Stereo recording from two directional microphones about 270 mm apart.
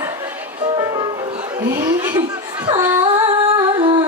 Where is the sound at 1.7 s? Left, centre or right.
Centre.